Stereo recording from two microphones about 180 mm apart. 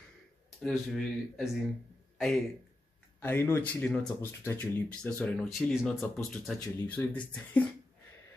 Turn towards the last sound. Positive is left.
turn(degrees=5)  # may be behind; listen again after turning